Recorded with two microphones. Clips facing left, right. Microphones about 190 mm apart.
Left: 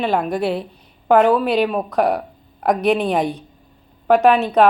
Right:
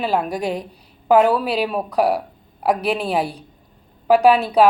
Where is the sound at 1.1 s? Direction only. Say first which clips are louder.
Left 1 dB; 5° right (ahead or behind).